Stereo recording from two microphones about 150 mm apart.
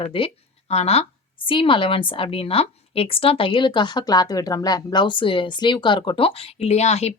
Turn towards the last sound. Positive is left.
turn(degrees=45)  # may be behind; listen again after turning